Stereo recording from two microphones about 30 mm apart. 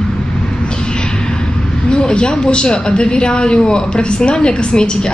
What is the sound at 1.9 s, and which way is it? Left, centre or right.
A woman's voice, left.